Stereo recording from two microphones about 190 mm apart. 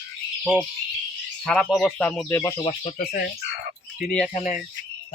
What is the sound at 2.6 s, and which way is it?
Speech, 30° left (ahead or behind).